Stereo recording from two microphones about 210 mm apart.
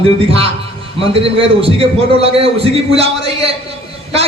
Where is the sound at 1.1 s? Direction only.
25° right (ahead or behind).